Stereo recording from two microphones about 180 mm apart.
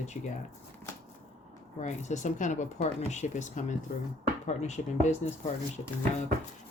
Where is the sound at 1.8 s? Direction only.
40° left (ahead or behind).